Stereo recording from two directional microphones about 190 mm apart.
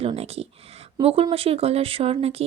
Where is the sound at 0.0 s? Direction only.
35° right (ahead or behind).